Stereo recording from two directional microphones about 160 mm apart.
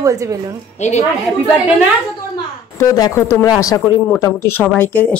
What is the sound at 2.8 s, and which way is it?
Speech, 20° left (ahead or behind).